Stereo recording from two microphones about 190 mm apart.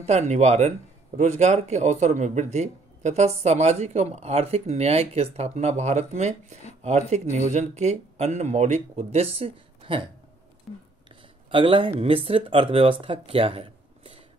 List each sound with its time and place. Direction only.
0.0 s speech: 35° right (ahead or behind)
11.5 s speech: 30° right (ahead or behind)
13.0 s a sound: 30° right (ahead or behind)